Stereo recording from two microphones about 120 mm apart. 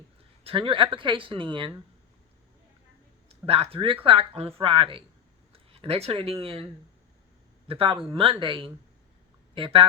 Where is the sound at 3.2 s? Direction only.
55° right (ahead or behind).